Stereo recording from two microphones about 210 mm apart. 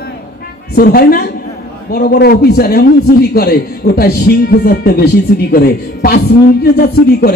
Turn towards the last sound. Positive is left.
turn(degrees=45)  # may be behind; listen again after turning